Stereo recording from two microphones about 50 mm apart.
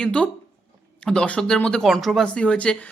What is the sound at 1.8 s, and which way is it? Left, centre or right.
Speech, centre.